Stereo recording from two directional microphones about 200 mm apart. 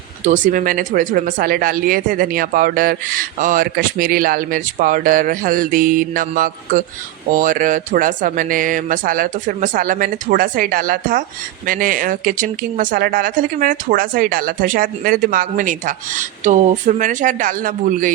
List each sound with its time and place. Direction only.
0.3 s speech: 40° right (ahead or behind)